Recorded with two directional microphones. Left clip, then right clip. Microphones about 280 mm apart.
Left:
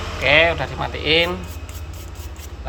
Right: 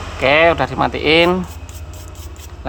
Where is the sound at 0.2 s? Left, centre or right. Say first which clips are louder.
Right 3 dB; centre.